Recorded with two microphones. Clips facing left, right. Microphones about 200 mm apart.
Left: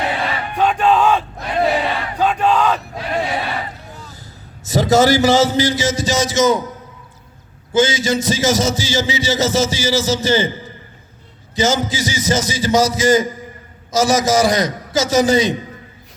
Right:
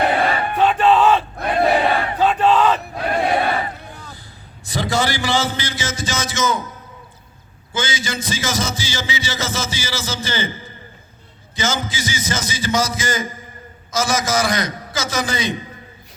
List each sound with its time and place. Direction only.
0.0 s battle cry: 55° right (ahead or behind)
0.5 s battle cry: 5° right (ahead or behind)
3.0 s battle cry: 55° right (ahead or behind)
4.6 s a man's voice: 40° left (ahead or behind)
7.7 s a man's voice: 40° left (ahead or behind)